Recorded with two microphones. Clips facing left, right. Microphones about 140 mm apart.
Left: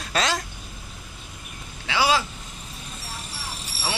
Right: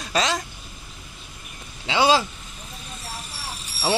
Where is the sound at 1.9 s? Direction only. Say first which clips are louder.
Right 3 dB; 25° right (ahead or behind).